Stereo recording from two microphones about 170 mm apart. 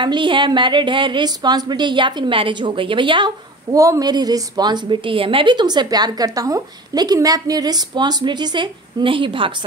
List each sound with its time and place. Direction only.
0.0 s a woman's voice: 30° right (ahead or behind)